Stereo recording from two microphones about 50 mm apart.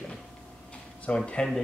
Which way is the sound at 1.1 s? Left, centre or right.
Left.